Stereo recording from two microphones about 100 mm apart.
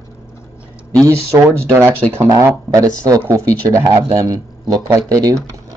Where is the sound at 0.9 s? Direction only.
30° right (ahead or behind).